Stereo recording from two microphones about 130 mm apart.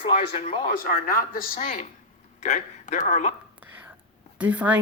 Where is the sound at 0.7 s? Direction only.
90° left.